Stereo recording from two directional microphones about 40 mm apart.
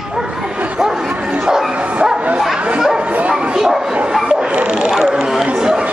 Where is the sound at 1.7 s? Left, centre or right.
Right.